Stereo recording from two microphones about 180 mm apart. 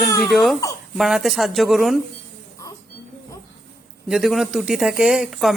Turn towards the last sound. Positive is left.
turn(degrees=0)  # may be behind; listen again after turning